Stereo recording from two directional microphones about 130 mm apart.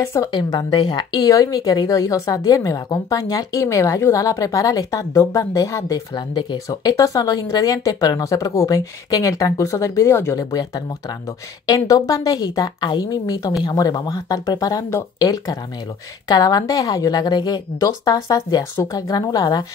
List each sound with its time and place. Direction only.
0.0 s speech: 20° left (ahead or behind)
0.3 s speech: 35° left (ahead or behind)